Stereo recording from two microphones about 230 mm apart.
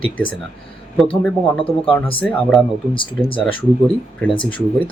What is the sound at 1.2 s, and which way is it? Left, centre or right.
Speech, centre.